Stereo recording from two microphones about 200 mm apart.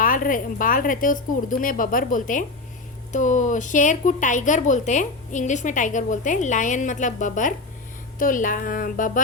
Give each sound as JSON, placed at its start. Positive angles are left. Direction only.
{"t": 0.0, "sound": "a woman's voice", "side_deg": 45}